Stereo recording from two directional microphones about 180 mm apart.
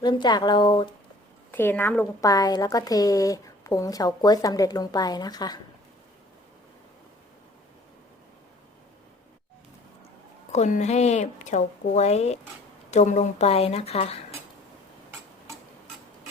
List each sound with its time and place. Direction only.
0.0 s a woman's voice: 25° left (ahead or behind)
1.5 s a woman's voice: 10° left (ahead or behind)
10.5 s speech: 40° left (ahead or behind)